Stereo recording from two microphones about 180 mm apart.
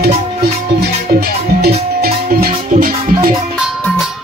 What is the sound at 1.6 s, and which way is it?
Music, 55° right (ahead or behind).